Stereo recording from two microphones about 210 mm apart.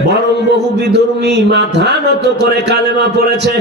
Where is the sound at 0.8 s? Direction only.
55° right (ahead or behind).